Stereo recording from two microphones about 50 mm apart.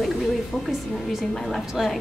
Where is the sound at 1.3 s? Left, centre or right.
Centre.